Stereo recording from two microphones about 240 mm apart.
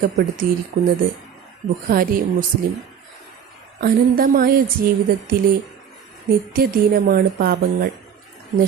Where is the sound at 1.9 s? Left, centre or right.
Right.